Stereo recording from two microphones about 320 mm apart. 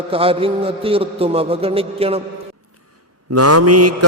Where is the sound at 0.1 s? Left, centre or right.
Centre.